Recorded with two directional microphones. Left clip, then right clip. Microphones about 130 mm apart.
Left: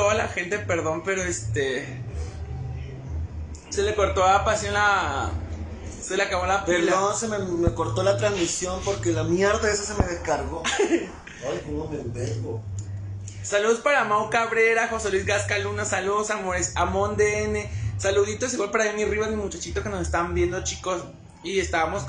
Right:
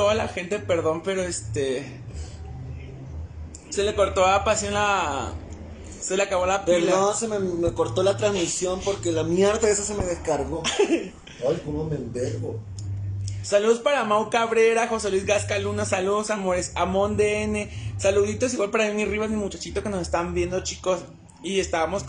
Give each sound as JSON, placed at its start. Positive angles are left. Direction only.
{"t": 0.0, "sound": "a man's voice", "side_deg": -15}
{"t": 3.7, "sound": "a man's voice", "side_deg": 0}
{"t": 10.6, "sound": "a man's voice", "side_deg": -15}
{"t": 13.5, "sound": "a man's voice", "side_deg": -15}